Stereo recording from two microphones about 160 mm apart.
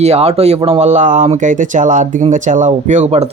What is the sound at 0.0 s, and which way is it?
Speech, 40° right (ahead or behind).